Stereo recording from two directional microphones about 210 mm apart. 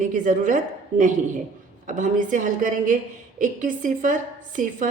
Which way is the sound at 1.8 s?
40° right (ahead or behind).